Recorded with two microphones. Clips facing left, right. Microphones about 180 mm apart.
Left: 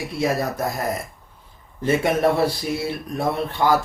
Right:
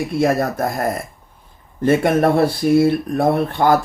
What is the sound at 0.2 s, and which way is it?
Speech, 55° right (ahead or behind).